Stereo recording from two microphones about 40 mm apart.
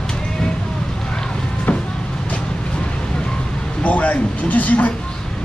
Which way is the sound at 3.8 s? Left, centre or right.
Left.